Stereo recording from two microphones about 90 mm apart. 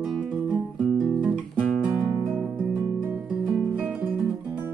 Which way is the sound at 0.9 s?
5° right (ahead or behind).